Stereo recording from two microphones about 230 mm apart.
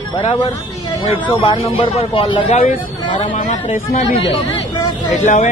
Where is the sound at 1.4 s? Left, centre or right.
Left.